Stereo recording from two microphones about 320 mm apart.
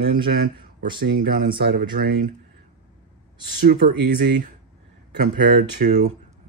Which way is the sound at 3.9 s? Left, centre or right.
Right.